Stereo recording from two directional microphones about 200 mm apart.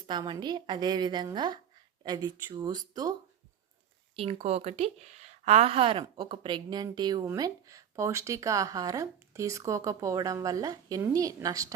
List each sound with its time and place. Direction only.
0.1 s a woman's voice: 20° right (ahead or behind)